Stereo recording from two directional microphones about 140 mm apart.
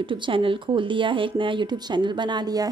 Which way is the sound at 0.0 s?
35° right (ahead or behind).